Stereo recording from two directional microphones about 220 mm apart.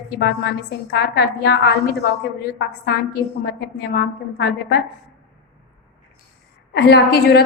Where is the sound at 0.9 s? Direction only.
45° left (ahead or behind).